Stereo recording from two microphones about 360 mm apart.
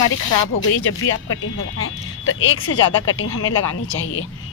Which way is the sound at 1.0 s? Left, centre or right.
Left.